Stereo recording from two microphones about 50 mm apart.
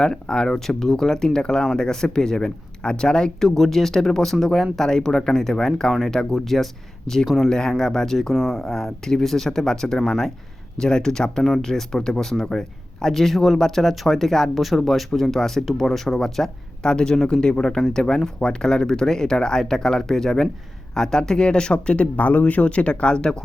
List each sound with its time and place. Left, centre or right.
0.0 s speech: centre
3.5 s speech: centre